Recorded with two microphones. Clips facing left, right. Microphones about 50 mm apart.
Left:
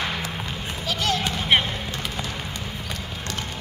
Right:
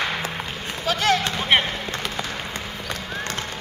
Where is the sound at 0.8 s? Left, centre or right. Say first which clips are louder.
Right 5 dB; right.